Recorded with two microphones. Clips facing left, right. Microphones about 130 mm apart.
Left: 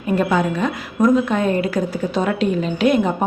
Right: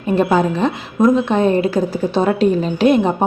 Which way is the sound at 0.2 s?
30° right (ahead or behind).